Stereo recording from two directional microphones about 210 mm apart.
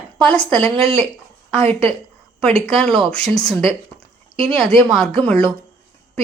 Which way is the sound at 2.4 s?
Centre (ahead or behind).